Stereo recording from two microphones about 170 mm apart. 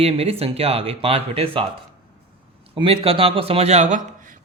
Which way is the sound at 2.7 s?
30° right (ahead or behind).